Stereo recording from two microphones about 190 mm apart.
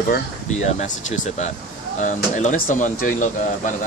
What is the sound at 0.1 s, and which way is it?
Speech, 40° left (ahead or behind).